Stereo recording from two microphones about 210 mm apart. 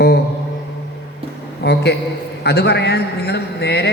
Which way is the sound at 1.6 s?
50° left (ahead or behind).